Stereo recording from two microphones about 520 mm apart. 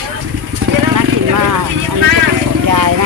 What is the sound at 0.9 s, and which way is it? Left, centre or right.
Vehicle, right.